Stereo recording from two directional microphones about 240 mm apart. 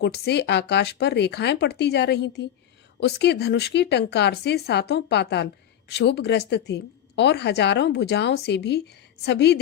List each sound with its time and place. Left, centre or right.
0.0 s a woman's voice: left